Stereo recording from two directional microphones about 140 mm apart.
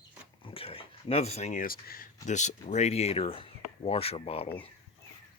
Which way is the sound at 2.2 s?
60° left (ahead or behind).